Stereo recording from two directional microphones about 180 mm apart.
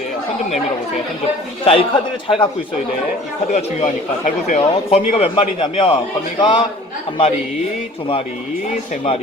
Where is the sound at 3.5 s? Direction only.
35° left (ahead or behind).